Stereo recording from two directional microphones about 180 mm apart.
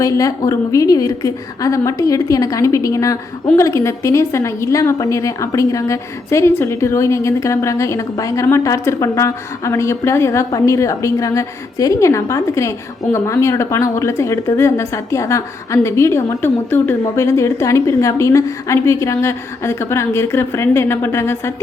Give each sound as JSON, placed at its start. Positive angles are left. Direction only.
{"t": 0.0, "sound": "a woman's voice", "side_deg": 20}